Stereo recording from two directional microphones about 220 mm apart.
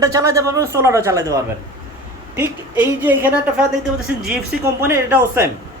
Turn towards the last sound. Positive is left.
turn(degrees=-10)  # may be behind; listen again after turning